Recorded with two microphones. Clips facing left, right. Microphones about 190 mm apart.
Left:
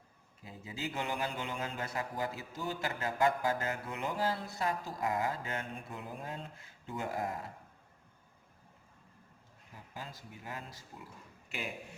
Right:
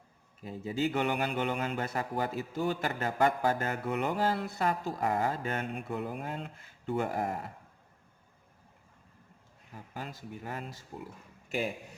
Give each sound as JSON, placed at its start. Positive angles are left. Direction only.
{"t": 0.4, "sound": "speech", "side_deg": -60}
{"t": 9.9, "sound": "speech", "side_deg": -60}
{"t": 11.4, "sound": "speech", "side_deg": -45}